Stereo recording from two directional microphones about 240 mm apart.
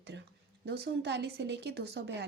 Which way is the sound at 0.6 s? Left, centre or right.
Right.